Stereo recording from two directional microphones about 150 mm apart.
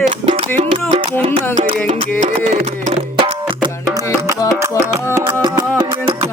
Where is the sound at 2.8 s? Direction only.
40° right (ahead or behind).